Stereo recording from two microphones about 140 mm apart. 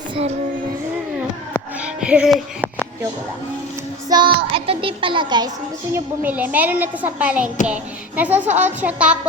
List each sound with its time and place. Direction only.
1.8 s music: 5° right (ahead or behind)
4.1 s child singing: 35° right (ahead or behind)
5.9 s speech: 10° right (ahead or behind)